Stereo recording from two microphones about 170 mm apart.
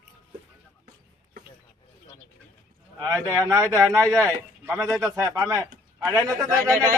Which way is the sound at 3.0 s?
20° right (ahead or behind).